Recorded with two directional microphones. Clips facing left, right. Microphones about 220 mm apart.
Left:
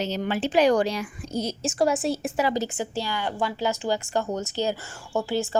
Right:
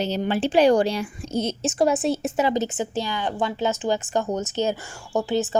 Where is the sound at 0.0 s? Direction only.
30° right (ahead or behind).